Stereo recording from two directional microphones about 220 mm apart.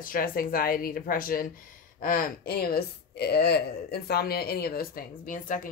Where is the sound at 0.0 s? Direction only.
40° left (ahead or behind).